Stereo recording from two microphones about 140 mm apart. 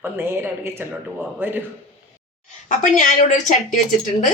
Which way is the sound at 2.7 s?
65° left (ahead or behind).